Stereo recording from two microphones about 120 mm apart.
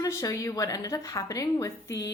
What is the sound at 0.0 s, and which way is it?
A woman's voice, 30° left (ahead or behind).